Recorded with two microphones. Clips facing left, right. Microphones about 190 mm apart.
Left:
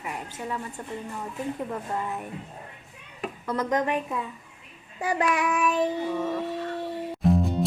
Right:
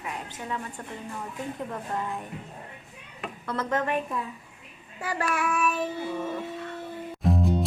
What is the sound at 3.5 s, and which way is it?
Child singing, 15° left (ahead or behind).